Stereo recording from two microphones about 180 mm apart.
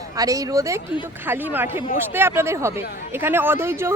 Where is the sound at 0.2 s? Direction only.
20° right (ahead or behind).